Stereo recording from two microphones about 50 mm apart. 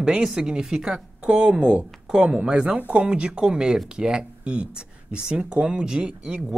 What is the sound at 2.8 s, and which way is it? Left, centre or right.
Speech, right.